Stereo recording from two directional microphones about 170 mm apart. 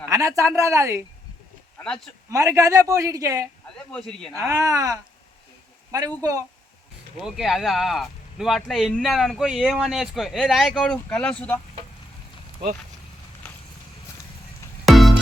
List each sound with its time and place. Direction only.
0.1 s a man's voice: 20° right (ahead or behind)
1.8 s speech: 5° left (ahead or behind)
2.3 s a man's voice: 15° right (ahead or behind)
3.8 s speech: 5° left (ahead or behind)
4.4 s speech: 20° right (ahead or behind)
7.2 s speech: centre (ahead or behind)
14.8 s music: centre (ahead or behind)